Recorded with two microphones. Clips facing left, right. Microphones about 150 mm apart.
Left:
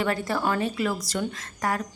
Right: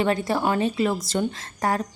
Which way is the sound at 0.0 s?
20° right (ahead or behind).